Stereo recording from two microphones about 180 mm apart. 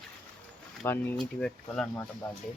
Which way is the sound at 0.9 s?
5° left (ahead or behind).